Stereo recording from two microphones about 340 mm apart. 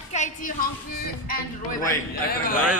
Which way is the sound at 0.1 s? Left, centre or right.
Left.